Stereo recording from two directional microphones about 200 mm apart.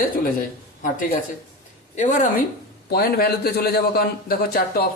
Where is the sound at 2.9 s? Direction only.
50° left (ahead or behind).